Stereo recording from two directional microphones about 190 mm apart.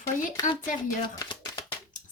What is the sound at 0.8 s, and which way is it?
Speech, 20° left (ahead or behind).